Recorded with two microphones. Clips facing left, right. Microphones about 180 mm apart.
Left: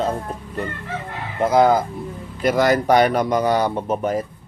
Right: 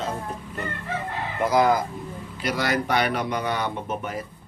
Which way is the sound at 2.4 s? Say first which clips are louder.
Left 8 dB; 45° left (ahead or behind).